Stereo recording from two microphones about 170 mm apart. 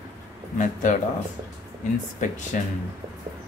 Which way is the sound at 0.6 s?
45° left (ahead or behind).